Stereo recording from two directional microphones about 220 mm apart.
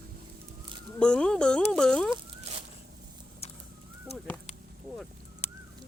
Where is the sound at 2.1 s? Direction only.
25° right (ahead or behind).